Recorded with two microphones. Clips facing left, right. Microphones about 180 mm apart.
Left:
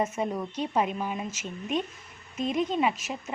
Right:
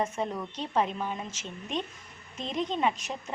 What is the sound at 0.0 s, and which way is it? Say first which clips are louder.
A woman's voice: left 2 dB; 10° left (ahead or behind).